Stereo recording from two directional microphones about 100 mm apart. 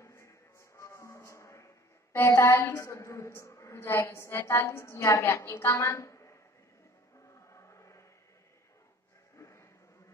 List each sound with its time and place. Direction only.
0.0 s music: 30° left (ahead or behind)
2.1 s a woman's voice: 25° left (ahead or behind)
7.2 s music: 30° left (ahead or behind)
9.4 s a sound: 30° left (ahead or behind)